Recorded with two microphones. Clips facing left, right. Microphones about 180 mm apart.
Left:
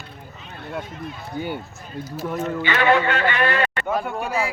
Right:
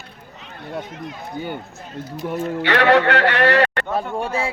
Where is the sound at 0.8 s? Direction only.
80° right.